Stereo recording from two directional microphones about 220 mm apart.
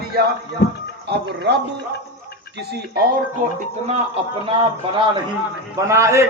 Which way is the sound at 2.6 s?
45° right (ahead or behind).